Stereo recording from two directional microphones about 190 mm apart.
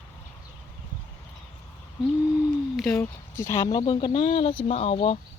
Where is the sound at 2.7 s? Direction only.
10° left (ahead or behind); by 5.2 s 30° left (ahead or behind).